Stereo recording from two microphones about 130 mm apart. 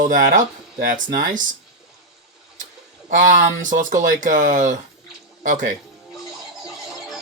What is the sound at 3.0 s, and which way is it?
Speech, 80° right.